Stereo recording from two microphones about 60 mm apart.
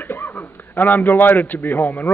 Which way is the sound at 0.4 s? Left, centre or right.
Left.